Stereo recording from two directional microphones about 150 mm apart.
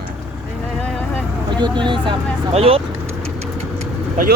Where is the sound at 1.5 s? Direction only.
30° right (ahead or behind).